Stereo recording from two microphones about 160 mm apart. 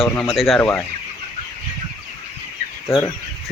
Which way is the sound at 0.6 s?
10° left (ahead or behind).